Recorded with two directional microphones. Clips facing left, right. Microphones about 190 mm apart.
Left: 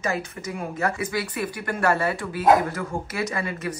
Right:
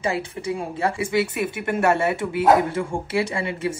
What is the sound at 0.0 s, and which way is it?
Speech, 30° right (ahead or behind).